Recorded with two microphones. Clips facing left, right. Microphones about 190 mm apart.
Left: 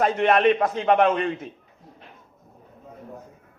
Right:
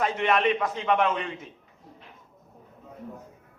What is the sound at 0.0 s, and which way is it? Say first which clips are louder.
A man's voice: left 5 dB; 45° left (ahead or behind).